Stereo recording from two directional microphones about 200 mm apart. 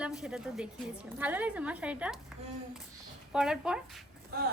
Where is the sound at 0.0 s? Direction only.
5° right (ahead or behind).